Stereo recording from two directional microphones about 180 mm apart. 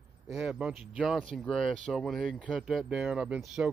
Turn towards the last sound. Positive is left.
turn(degrees=-5)  # may be behind; listen again after turning